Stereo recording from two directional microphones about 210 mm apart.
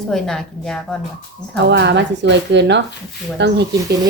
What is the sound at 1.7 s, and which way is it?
Speech, 55° right (ahead or behind).